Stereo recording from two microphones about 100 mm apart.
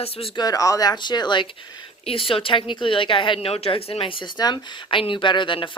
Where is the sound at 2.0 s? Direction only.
65° left (ahead or behind).